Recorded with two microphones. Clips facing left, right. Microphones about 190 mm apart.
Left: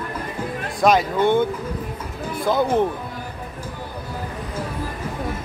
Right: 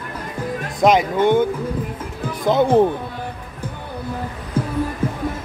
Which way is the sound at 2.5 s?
25° right (ahead or behind).